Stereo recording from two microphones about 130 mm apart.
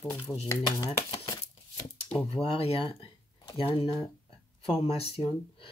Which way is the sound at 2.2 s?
45° left (ahead or behind).